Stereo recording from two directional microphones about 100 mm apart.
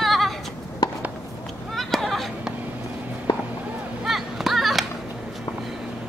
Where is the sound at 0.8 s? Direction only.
45° left (ahead or behind).